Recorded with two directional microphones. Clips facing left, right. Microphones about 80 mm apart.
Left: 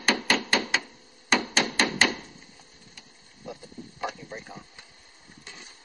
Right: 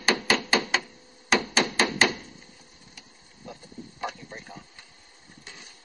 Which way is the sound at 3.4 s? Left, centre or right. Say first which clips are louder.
Left 2 dB; centre.